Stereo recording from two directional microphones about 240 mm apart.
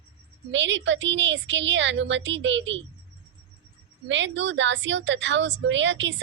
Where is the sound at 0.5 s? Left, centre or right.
Right.